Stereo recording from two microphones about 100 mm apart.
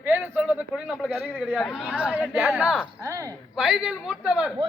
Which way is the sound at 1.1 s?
20° right (ahead or behind).